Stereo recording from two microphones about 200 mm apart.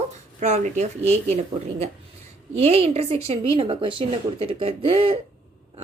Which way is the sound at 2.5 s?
30° right (ahead or behind).